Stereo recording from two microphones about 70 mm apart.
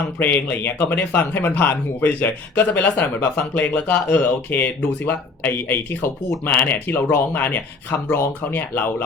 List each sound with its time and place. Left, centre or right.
0.2 s speech: left